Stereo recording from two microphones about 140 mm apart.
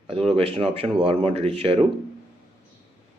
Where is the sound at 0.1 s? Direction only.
45° right (ahead or behind).